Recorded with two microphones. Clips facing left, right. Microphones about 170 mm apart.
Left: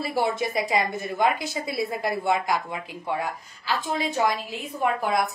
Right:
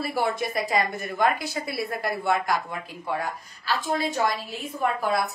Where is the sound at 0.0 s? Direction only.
15° left (ahead or behind).